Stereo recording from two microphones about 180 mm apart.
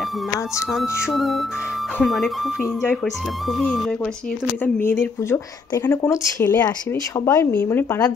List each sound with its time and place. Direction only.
1.0 s speech: centre (ahead or behind)
5.0 s speech: 15° left (ahead or behind)